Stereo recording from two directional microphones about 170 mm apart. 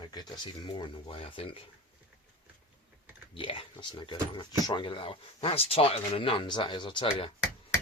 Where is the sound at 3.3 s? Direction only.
30° left (ahead or behind).